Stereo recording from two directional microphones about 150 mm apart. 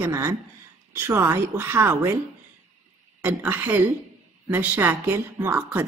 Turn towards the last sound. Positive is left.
turn(degrees=-10)  # may be behind; listen again after turning